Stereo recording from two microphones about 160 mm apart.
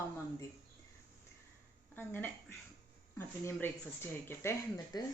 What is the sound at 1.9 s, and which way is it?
Speech, 15° left (ahead or behind).